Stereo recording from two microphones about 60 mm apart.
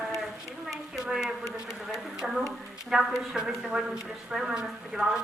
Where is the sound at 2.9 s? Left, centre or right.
Centre.